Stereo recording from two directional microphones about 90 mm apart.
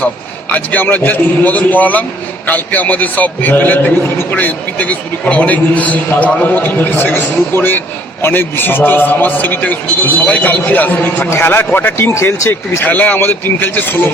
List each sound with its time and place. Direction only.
0.5 s a man's voice: 20° left (ahead or behind)
12.8 s a man's voice: 20° left (ahead or behind)